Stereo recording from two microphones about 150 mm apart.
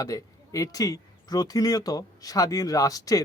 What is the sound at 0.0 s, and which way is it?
Speech, 20° left (ahead or behind).